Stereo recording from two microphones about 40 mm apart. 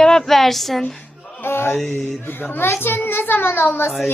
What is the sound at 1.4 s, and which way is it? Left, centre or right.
Speech, left.